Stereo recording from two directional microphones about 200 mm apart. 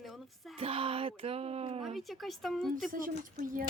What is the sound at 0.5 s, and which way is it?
Speech, 30° right (ahead or behind).